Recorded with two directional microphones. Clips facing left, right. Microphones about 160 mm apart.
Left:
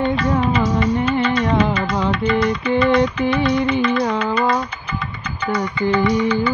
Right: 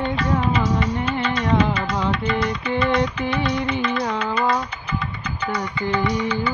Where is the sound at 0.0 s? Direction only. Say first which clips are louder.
Left 4 dB; 50° left (ahead or behind).